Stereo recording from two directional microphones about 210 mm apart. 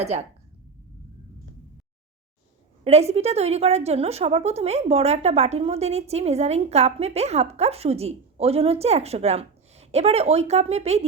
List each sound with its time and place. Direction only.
0.0 s a woman's voice: 30° right (ahead or behind)
2.8 s a woman's voice: 30° right (ahead or behind)